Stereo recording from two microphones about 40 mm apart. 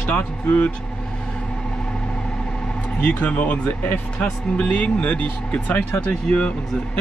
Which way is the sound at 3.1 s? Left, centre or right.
Left.